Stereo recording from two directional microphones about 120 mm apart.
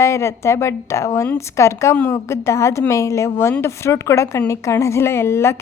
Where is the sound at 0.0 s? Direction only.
25° left (ahead or behind).